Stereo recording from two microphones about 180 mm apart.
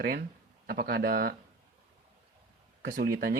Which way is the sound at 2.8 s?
55° right (ahead or behind).